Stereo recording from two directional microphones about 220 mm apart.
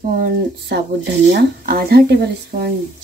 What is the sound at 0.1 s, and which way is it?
Speech, 45° right (ahead or behind).